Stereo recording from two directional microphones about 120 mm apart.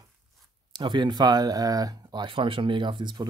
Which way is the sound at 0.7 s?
40° right (ahead or behind).